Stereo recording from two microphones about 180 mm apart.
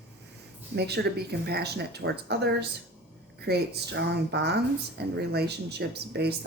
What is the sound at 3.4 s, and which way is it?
A woman's voice, 65° right (ahead or behind).